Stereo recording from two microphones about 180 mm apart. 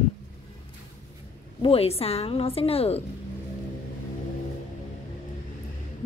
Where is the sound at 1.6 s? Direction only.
30° left (ahead or behind).